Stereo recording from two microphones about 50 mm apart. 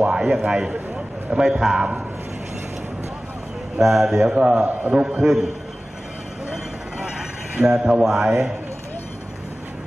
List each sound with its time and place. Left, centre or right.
0.0 s a man's voice: centre
3.8 s a man's voice: centre; by 5.0 s right
5.0 s a man's voice: centre
7.6 s a man's voice: centre